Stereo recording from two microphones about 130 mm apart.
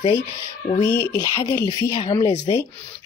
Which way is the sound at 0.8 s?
30° left (ahead or behind).